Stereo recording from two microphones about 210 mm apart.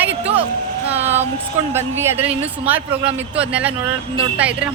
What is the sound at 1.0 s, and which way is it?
Child singing, 30° right (ahead or behind).